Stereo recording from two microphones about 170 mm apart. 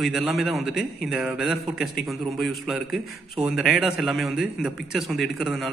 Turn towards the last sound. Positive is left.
turn(degrees=0)  # may be behind; listen again after turning